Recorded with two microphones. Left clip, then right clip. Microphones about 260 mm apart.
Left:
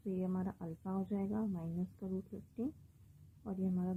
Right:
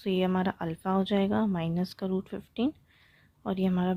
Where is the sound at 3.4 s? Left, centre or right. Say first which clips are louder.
Right 12 dB; right.